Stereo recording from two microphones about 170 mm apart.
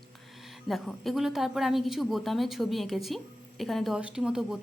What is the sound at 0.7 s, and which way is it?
A woman's voice, centre (ahead or behind).